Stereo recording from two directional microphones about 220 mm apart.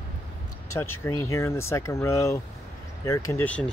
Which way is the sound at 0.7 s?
10° left (ahead or behind).